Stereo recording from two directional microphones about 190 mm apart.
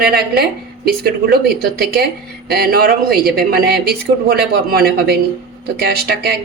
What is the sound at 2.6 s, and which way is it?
A woman's voice, 50° right (ahead or behind).